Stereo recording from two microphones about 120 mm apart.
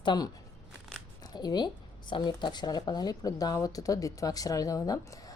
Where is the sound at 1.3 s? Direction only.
35° left (ahead or behind).